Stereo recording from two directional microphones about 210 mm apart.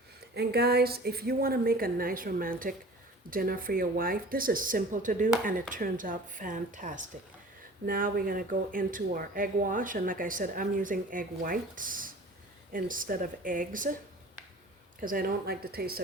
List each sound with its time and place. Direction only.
0.3 s a woman's voice: 50° right (ahead or behind)
15.0 s a woman's voice: 45° right (ahead or behind)